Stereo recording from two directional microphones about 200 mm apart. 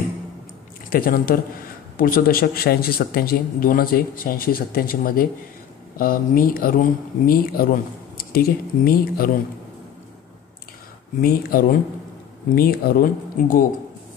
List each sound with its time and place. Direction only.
0.8 s speech: 45° left (ahead or behind)
11.1 s speech: 50° left (ahead or behind)